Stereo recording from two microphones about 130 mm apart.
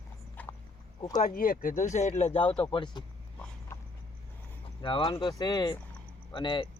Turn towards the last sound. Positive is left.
turn(degrees=35)  # may be behind; listen again after turning